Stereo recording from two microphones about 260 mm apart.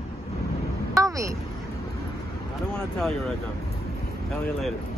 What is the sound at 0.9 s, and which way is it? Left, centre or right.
Vehicle, centre.